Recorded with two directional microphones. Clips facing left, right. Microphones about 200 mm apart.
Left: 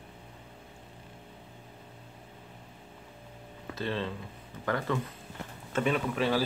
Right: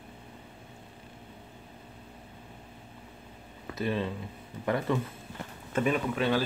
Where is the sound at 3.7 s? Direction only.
15° right (ahead or behind).